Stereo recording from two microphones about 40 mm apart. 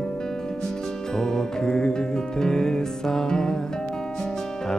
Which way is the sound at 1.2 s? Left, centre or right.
Centre.